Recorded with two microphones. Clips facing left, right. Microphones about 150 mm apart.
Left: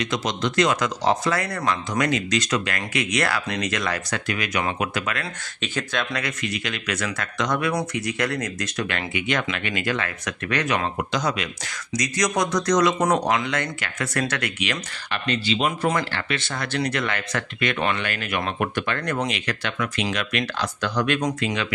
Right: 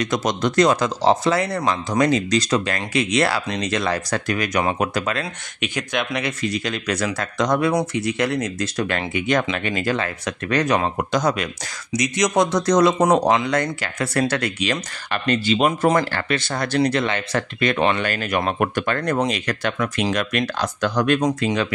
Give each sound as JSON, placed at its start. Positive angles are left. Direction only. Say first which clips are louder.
{"t": 0.0, "sound": "speech", "louder": "right 4 dB", "side_deg": -45}
{"t": 5.6, "sound": "speech", "louder": "right 2 dB", "side_deg": -15}
{"t": 6.4, "sound": "speech", "louder": "right 5 dB", "side_deg": -35}
{"t": 11.9, "sound": "speech", "louder": "right 4 dB", "side_deg": -25}
{"t": 15.2, "sound": "speech", "louder": "right 5 dB", "side_deg": -45}
{"t": 21.2, "sound": "speech", "louder": "right 5 dB", "side_deg": -35}